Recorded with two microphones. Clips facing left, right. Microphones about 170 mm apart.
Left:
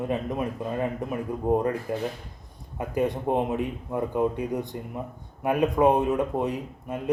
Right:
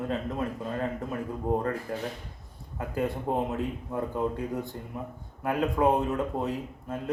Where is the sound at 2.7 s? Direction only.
20° left (ahead or behind).